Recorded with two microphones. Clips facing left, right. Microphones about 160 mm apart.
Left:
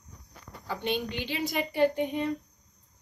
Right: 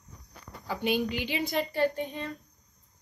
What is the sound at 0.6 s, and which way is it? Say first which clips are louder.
Speech: right 3 dB; 5° right (ahead or behind).